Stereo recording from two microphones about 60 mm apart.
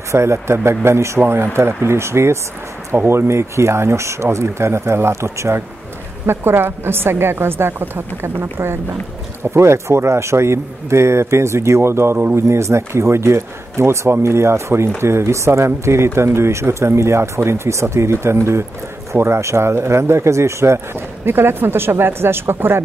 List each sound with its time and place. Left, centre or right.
0.1 s a woman's voice: right
21.3 s a woman's voice: right